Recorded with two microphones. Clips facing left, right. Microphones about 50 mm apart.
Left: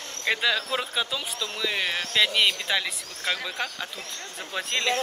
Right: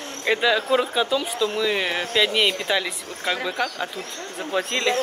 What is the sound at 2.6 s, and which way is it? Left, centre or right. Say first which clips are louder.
Speech: right 4 dB; centre.